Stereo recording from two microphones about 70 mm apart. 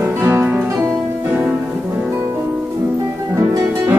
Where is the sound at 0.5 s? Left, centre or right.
Centre.